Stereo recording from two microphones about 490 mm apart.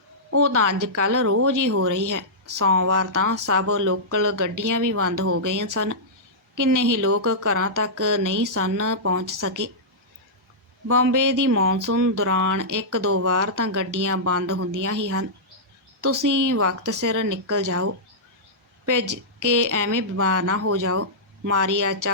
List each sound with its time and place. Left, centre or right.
0.3 s speech: right
10.9 s speech: right